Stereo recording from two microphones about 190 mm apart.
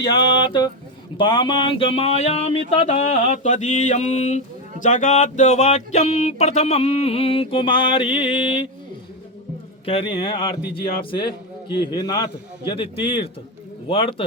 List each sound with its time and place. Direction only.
0.0 s a sound: 25° left (ahead or behind)
9.8 s a man's voice: 30° left (ahead or behind)
11.7 s a man's voice: 25° left (ahead or behind)